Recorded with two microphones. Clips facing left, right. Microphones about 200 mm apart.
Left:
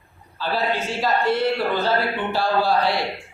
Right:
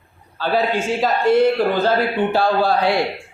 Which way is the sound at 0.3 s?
55° right (ahead or behind).